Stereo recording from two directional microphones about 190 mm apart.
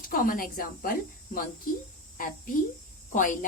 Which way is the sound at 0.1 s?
50° left (ahead or behind).